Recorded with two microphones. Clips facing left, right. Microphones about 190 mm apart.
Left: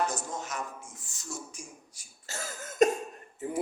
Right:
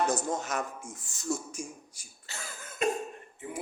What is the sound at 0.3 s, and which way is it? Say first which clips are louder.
Speech: right 5 dB; 50° right (ahead or behind).